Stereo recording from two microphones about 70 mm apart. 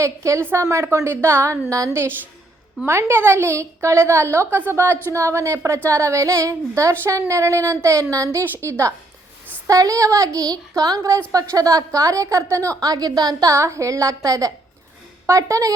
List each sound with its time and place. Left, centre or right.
0.0 s a woman's voice: right
9.6 s a woman's voice: right
12.8 s speech: right
13.5 s a woman's voice: right